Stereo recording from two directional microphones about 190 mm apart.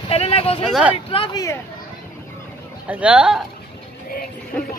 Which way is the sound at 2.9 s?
5° right (ahead or behind).